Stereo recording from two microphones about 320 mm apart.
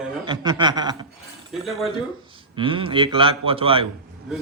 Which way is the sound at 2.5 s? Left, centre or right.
Centre.